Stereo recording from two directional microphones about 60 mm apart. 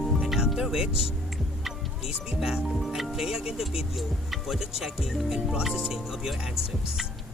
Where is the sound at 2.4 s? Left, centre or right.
Centre.